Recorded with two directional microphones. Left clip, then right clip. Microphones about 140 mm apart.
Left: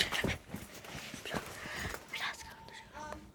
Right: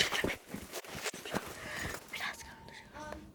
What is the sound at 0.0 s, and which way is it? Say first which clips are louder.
Dog: right 1 dB; 10° left (ahead or behind).